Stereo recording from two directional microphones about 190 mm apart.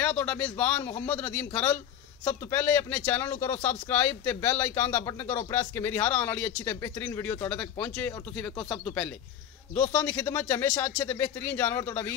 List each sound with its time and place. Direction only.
0.0 s speech: 10° left (ahead or behind)